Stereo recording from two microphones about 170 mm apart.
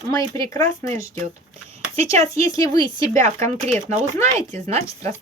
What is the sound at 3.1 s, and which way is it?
Speech, 45° right (ahead or behind).